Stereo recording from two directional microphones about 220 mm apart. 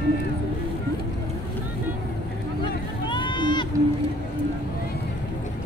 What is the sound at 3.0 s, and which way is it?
Run, 20° left (ahead or behind).